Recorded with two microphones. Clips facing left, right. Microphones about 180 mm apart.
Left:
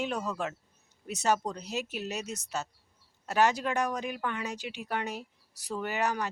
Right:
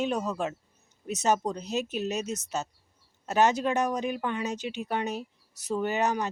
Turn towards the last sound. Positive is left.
turn(degrees=-20)  # may be behind; listen again after turning